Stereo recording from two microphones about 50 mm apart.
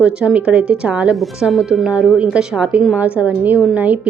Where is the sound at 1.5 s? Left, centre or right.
Centre; by 4.1 s right.